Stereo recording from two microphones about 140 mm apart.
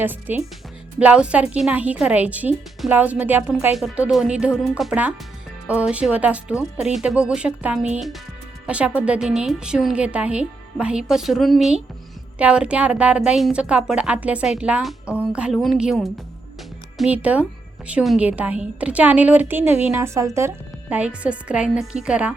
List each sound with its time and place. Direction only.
0.0 s a woman's voice: 15° right (ahead or behind)
15.0 s a sound: 15° left (ahead or behind)
15.3 s a woman's voice: 5° right (ahead or behind)
20.9 s a woman's voice: 10° right (ahead or behind)